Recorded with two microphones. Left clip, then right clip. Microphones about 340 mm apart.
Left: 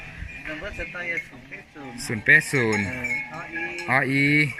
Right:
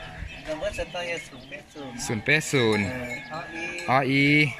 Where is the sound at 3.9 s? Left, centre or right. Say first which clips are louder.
Even; centre.